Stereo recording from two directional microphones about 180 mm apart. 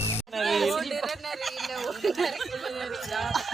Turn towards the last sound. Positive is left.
turn(degrees=0)  # may be behind; listen again after turning